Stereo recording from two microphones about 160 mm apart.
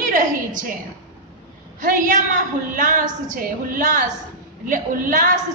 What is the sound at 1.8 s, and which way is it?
A woman's voice, 55° right (ahead or behind).